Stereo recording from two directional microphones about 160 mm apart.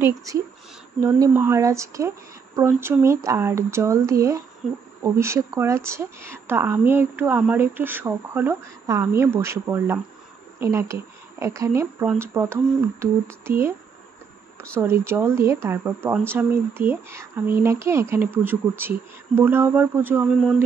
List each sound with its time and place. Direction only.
0.0 s speech: 20° right (ahead or behind)
4.6 s speech: 5° right (ahead or behind)
5.0 s speech: 15° right (ahead or behind)
14.8 s speech: 15° right (ahead or behind)